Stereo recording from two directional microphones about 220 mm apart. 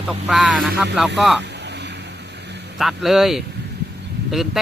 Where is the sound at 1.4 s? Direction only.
50° right (ahead or behind).